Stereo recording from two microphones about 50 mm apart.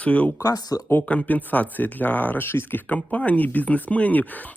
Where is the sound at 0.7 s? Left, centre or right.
Left.